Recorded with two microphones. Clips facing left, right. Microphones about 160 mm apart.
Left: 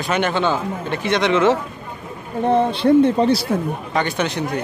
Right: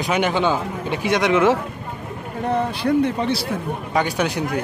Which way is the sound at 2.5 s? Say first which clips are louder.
Left 5 dB; 25° left (ahead or behind).